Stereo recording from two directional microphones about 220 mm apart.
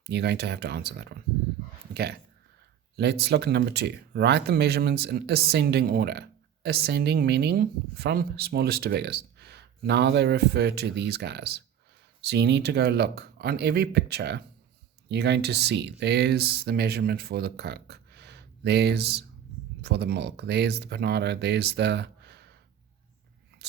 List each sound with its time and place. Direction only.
0.0 s speech: 50° right (ahead or behind)